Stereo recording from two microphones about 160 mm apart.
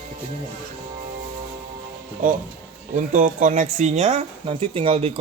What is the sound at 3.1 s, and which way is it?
Speech, 50° right (ahead or behind).